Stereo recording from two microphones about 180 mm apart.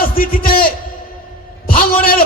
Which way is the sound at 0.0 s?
55° left (ahead or behind).